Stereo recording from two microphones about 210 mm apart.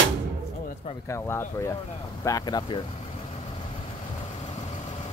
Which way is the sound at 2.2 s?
20° left (ahead or behind).